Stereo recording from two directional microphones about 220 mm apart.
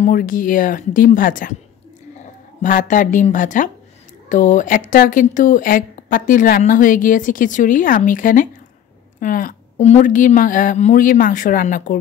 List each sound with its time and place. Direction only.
0.0 s speech: 40° left (ahead or behind)
2.6 s speech: 35° left (ahead or behind)